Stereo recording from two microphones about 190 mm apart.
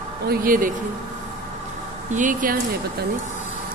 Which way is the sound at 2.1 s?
45° right (ahead or behind).